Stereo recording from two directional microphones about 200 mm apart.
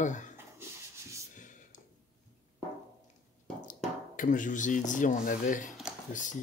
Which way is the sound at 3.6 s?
40° left (ahead or behind).